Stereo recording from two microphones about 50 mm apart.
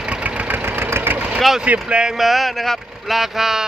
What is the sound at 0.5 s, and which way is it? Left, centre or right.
Engine, right.